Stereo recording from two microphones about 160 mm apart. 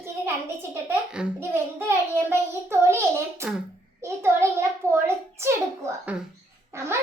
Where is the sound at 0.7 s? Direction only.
10° right (ahead or behind).